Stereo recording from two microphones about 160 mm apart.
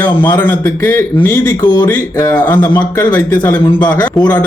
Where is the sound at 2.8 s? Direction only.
25° left (ahead or behind).